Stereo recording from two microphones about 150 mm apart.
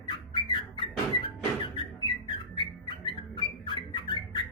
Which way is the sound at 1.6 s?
35° left (ahead or behind).